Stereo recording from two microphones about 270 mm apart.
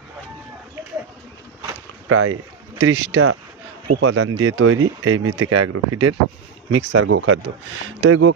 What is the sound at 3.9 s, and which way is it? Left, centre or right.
Speech, right.